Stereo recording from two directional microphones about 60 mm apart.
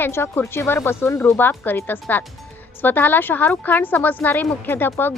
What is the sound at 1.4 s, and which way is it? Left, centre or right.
A woman's voice, left.